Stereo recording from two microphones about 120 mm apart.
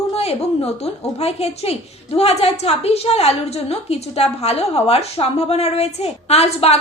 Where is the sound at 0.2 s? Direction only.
60° left (ahead or behind).